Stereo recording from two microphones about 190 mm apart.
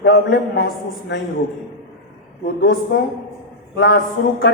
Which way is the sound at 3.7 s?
55° left (ahead or behind).